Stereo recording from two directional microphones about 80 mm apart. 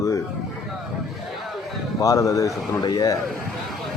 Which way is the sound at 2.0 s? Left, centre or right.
Left.